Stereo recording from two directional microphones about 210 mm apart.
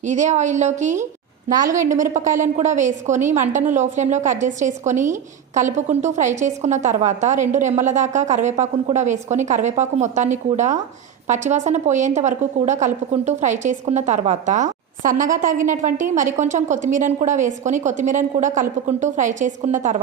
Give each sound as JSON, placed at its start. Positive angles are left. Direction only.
{"t": 0.0, "sound": "a woman's voice", "side_deg": -35}